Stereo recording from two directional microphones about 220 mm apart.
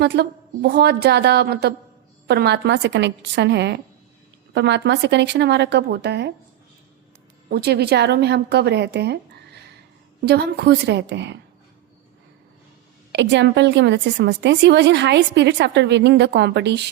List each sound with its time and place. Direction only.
0.0 s a woman's voice: 50° right (ahead or behind)
7.5 s a woman's voice: 45° right (ahead or behind)
13.1 s a woman's voice: 50° right (ahead or behind)